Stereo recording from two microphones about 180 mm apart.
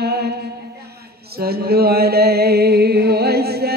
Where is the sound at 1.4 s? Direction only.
60° right (ahead or behind).